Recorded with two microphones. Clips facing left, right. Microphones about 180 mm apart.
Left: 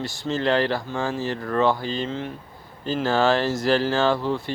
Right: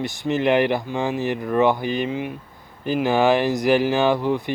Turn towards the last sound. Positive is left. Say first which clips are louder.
# right 2 dB
turn(degrees=-15)  # may be behind; listen again after turning